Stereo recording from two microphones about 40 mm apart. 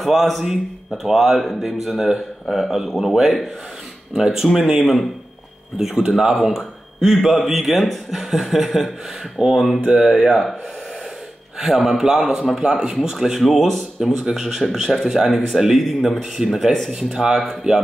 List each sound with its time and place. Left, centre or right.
0.0 s speech: centre
4.1 s speech: centre
11.6 s speech: centre
12.6 s speech: centre
13.4 s speech: centre
14.2 s speech: centre
16.4 s speech: centre